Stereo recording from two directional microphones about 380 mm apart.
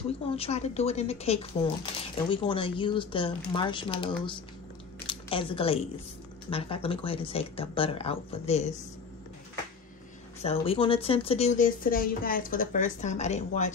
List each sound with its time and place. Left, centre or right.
0.4 s speech: centre
10.4 s speech: centre